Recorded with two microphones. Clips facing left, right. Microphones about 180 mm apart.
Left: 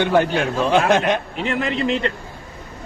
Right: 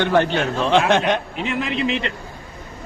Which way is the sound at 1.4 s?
60° left (ahead or behind).